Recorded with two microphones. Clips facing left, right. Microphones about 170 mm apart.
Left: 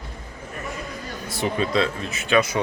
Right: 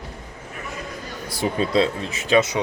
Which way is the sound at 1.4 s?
30° right (ahead or behind).